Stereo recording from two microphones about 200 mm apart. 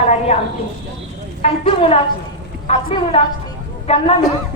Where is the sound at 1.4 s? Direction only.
30° left (ahead or behind).